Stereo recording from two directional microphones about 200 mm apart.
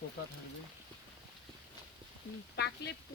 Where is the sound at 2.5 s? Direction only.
55° left (ahead or behind).